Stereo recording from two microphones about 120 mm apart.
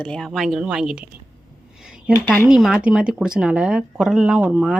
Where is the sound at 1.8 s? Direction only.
5° right (ahead or behind).